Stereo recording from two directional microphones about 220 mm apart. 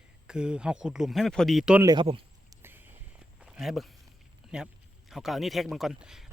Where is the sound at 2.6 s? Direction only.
10° right (ahead or behind).